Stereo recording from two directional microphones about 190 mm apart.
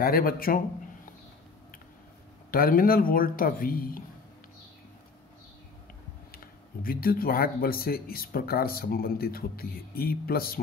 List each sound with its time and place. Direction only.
0.0 s speech: 50° left (ahead or behind)
2.5 s speech: 50° left (ahead or behind)
6.3 s speech: 50° left (ahead or behind)